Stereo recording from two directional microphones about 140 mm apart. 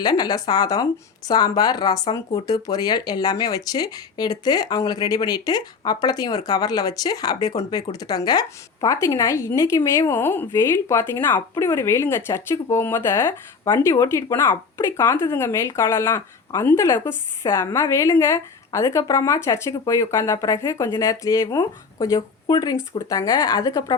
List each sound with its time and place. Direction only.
0.0 s speech: 30° left (ahead or behind)